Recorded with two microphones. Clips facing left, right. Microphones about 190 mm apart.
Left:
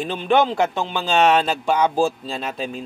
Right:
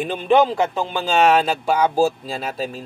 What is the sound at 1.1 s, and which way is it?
Speech, 5° right (ahead or behind).